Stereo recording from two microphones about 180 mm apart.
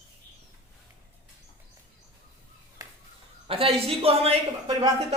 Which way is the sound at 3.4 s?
30° right (ahead or behind).